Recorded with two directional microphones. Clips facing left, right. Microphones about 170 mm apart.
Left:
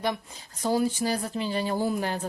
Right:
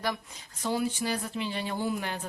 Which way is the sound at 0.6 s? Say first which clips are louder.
Left 4 dB; 40° left (ahead or behind).